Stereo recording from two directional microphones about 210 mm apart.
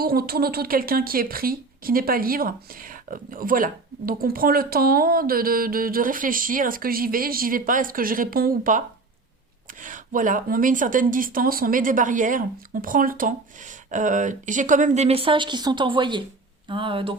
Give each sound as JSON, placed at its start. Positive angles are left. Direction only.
{"t": 0.0, "sound": "speech", "side_deg": -45}
{"t": 9.8, "sound": "speech", "side_deg": -40}